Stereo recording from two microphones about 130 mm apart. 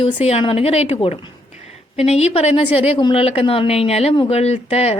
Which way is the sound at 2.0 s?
55° left (ahead or behind).